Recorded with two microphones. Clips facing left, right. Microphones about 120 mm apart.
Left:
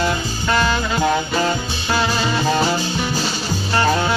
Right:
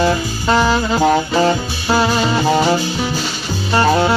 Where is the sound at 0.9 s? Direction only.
30° right (ahead or behind).